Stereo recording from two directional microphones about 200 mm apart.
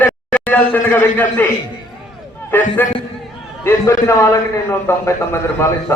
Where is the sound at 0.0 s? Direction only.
10° left (ahead or behind).